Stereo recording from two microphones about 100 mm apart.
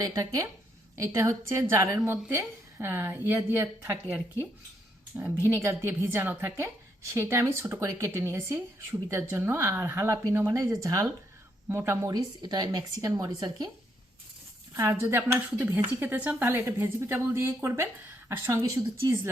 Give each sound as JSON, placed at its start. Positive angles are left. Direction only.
{"t": 0.0, "sound": "speech", "side_deg": -40}
{"t": 5.1, "sound": "speech", "side_deg": -15}
{"t": 5.6, "sound": "speech", "side_deg": -25}
{"t": 12.1, "sound": "speech", "side_deg": -45}
{"t": 14.8, "sound": "speech", "side_deg": -25}